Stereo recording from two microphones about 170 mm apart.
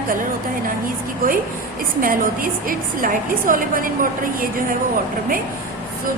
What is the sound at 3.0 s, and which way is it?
A woman's voice, 55° right (ahead or behind).